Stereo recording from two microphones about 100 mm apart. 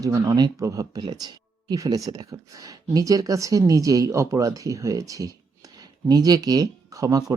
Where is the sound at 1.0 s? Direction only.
45° right (ahead or behind).